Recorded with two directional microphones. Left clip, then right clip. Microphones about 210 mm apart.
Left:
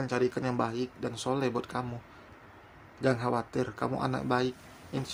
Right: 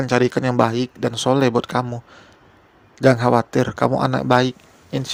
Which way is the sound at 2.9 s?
40° right (ahead or behind).